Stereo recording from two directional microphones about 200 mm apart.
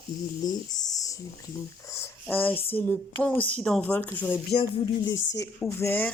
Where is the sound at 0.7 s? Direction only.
20° left (ahead or behind).